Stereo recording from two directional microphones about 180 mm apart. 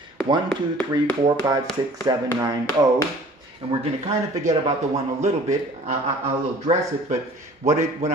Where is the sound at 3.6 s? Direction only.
30° right (ahead or behind).